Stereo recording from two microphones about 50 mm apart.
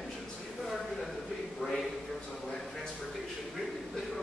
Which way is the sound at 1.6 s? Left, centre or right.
Centre.